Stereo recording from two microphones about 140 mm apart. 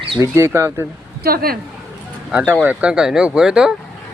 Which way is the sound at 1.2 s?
90° right.